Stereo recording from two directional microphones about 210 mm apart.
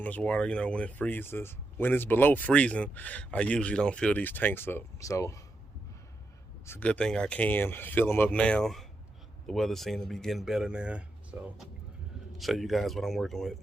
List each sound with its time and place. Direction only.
0.0 s speech: 5° left (ahead or behind)
6.7 s speech: 5° left (ahead or behind)